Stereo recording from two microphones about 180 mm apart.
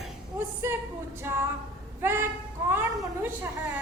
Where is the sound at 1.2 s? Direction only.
15° right (ahead or behind).